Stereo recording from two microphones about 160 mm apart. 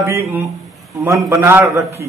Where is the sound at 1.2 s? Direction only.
15° right (ahead or behind).